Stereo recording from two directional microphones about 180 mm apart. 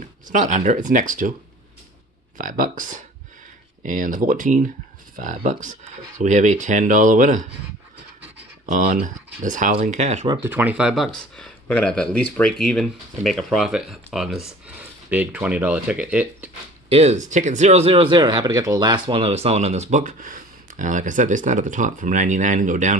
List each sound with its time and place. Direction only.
0.3 s speech: 45° right (ahead or behind)
2.3 s speech: 50° right (ahead or behind)
8.6 s speech: 45° right (ahead or behind)
10.4 s speech: 10° right (ahead or behind)
16.9 s speech: 40° right (ahead or behind); by 18.9 s 20° right (ahead or behind)
19.0 s speech: 30° right (ahead or behind)